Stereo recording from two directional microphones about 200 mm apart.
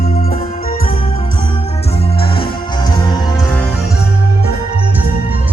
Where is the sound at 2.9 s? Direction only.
20° left (ahead or behind).